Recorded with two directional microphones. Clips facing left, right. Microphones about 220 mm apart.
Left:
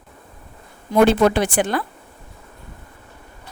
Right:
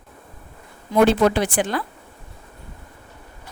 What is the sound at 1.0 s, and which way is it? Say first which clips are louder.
Speech: left 1 dB; 60° left (ahead or behind).